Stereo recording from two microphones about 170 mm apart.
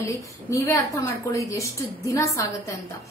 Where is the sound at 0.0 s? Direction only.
20° left (ahead or behind).